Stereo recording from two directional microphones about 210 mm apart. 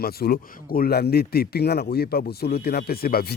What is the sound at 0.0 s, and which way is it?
A man's voice, 45° left (ahead or behind).